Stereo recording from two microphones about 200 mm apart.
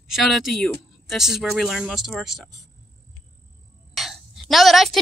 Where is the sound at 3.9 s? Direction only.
Centre (ahead or behind).